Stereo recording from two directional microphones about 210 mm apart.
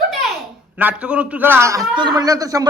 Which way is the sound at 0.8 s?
5° right (ahead or behind).